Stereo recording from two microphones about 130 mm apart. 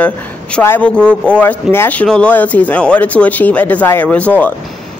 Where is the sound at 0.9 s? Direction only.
10° left (ahead or behind).